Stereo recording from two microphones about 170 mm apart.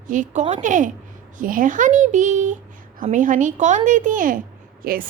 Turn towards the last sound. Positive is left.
turn(degrees=-60)  # may be behind; listen again after turning